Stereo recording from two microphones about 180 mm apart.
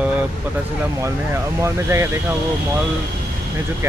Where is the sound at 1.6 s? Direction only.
15° right (ahead or behind).